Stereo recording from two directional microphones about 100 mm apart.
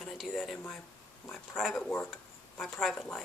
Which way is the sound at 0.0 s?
Centre (ahead or behind).